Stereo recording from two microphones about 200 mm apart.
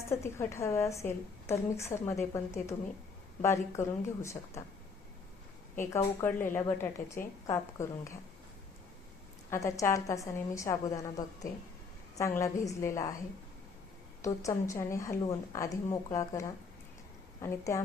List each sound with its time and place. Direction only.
0.1 s a woman's voice: 15° left (ahead or behind)
5.7 s a woman's voice: 10° left (ahead or behind)
9.5 s a woman's voice: 15° left (ahead or behind)
14.2 s a woman's voice: 15° left (ahead or behind)